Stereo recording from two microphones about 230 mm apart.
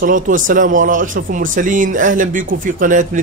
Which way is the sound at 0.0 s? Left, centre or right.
Right.